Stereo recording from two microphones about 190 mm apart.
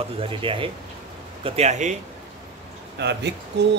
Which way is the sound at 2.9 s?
65° right (ahead or behind).